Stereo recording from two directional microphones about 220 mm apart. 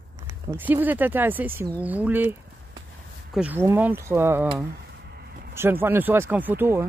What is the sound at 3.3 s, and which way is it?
Speech, 5° right (ahead or behind).